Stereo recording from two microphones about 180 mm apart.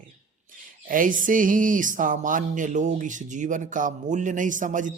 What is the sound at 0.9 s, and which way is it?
Speech, 50° right (ahead or behind).